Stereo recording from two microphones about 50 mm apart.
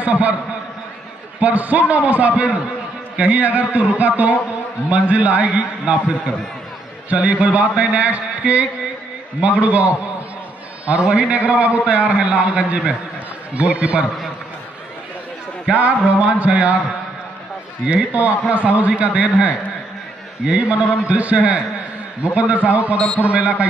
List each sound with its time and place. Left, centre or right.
0.0 s a man's voice: right
1.4 s a man's voice: right
15.7 s a man's voice: right
18.1 s a man's voice: right
20.4 s a man's voice: right
22.9 s a man's voice: centre
23.2 s a man's voice: right